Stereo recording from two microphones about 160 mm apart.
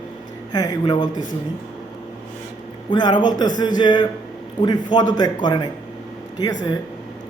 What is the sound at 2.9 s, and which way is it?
A man's voice, 30° left (ahead or behind).